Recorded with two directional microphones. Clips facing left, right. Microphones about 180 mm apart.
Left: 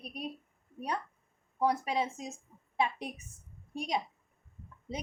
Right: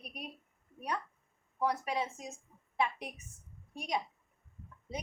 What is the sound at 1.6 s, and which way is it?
Speech, 25° left (ahead or behind).